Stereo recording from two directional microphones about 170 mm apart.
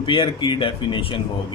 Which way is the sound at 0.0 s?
30° left (ahead or behind).